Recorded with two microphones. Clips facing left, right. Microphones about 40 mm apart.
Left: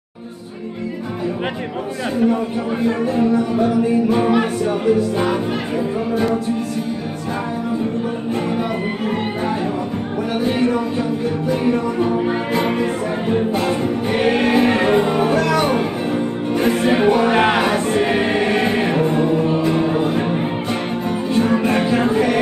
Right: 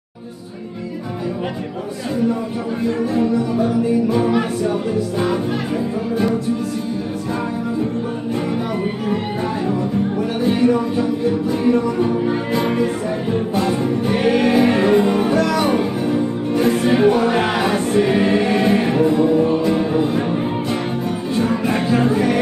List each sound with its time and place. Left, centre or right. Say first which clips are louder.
2.8 s music: left 1 dB; left
10.4 s music: right 3 dB; left
12.5 s music: right 1 dB; left
19.0 s music: right 2 dB; left
21.3 s music: left 2 dB; left